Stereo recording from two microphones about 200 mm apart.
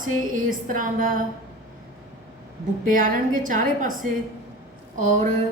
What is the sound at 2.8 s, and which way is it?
A woman's voice, 40° right (ahead or behind).